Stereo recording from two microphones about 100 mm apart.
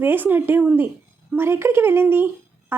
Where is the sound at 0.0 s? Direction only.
20° right (ahead or behind).